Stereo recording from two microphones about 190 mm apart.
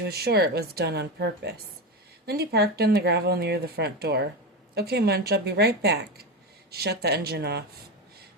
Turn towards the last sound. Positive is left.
turn(degrees=-60)  # may be behind; listen again after turning